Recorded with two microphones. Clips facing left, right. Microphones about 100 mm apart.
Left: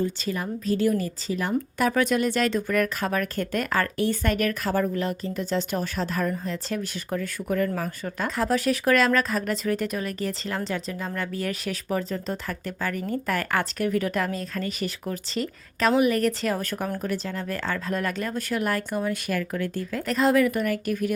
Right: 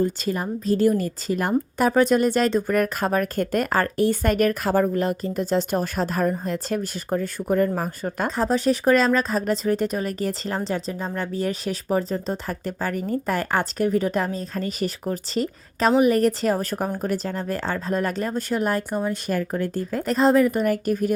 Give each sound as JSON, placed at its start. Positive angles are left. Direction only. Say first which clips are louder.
{"t": 0.0, "sound": "speech", "louder": "right 4 dB", "side_deg": -40}
{"t": 1.9, "sound": "speech", "louder": "right 6 dB", "side_deg": -35}